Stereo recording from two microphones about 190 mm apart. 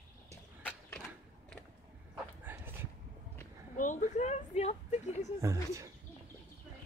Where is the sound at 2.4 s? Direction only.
10° right (ahead or behind).